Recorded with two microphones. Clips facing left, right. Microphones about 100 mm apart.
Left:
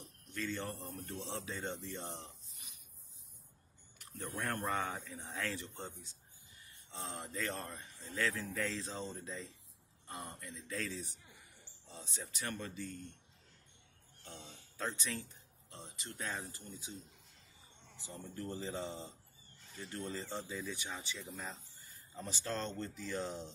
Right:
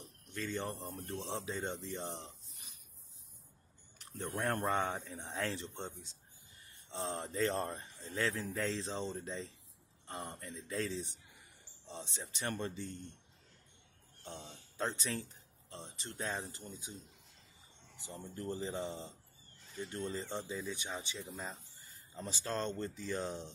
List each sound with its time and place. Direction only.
0.3 s speech: 20° right (ahead or behind)
2.5 s a sound: 35° right (ahead or behind)
4.0 s speech: 30° right (ahead or behind)
14.8 s speech: 30° right (ahead or behind)
17.9 s speech: 20° right (ahead or behind)